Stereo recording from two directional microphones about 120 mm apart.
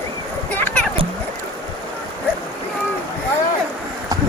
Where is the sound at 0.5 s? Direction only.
15° left (ahead or behind).